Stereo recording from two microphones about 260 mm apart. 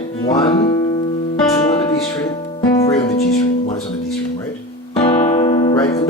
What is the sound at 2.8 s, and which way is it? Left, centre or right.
Speech, left.